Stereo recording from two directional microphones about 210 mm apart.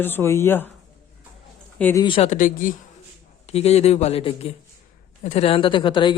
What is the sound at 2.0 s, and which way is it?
Speech, 30° left (ahead or behind).